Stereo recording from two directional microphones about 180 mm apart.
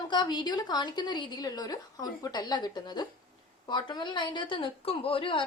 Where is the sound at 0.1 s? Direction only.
25° left (ahead or behind).